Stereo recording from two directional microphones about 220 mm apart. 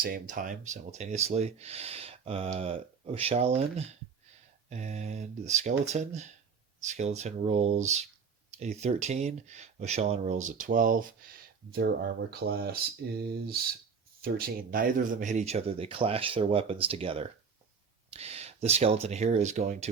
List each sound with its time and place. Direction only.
0.0 s speech: 40° right (ahead or behind)